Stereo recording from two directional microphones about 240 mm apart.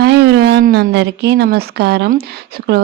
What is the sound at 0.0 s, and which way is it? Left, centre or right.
Speech, right.